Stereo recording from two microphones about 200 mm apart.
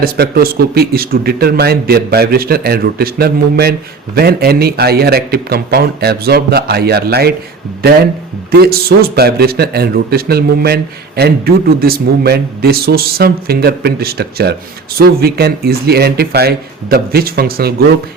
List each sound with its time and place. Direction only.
0.0 s speech: 50° right (ahead or behind)
8.5 s speech: 50° right (ahead or behind)